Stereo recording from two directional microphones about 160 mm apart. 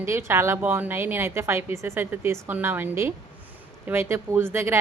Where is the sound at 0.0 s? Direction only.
15° right (ahead or behind).